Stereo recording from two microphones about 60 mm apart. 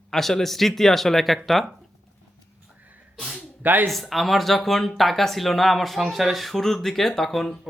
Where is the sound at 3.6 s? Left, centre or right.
Right.